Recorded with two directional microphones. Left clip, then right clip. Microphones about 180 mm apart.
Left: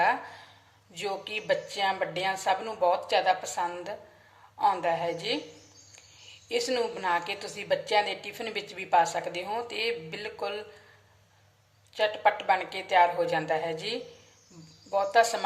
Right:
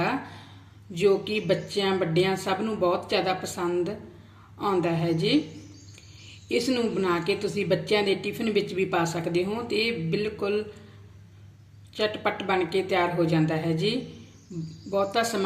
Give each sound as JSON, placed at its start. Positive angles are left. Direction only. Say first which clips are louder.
{"t": 0.0, "sound": "a sound", "louder": "left 3 dB", "side_deg": 0}
{"t": 0.9, "sound": "a woman's voice", "louder": "right 10 dB", "side_deg": 0}
{"t": 6.5, "sound": "a woman's voice", "louder": "right 3 dB", "side_deg": 0}
{"t": 11.9, "sound": "a woman's voice", "louder": "left 2 dB", "side_deg": 0}